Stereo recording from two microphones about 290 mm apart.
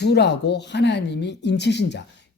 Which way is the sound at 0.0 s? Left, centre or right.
Left.